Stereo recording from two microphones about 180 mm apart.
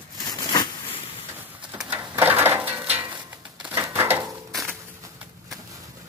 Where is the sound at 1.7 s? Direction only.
10° right (ahead or behind).